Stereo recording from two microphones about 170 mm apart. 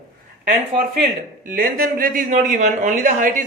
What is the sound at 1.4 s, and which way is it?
A man's voice, 55° right (ahead or behind).